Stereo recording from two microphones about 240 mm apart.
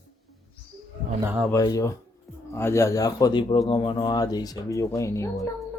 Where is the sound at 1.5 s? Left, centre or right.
Centre.